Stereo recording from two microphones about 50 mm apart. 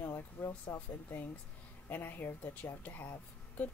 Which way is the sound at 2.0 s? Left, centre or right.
Left.